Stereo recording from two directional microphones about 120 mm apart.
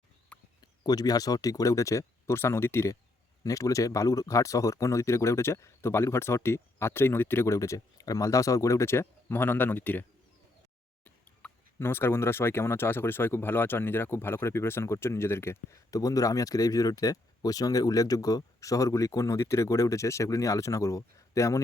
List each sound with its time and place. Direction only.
0.6 s speech: 30° left (ahead or behind)